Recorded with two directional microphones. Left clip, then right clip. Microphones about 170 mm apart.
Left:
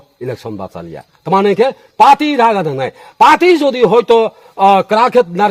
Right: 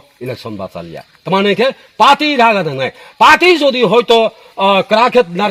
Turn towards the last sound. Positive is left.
turn(degrees=0)  # may be behind; listen again after turning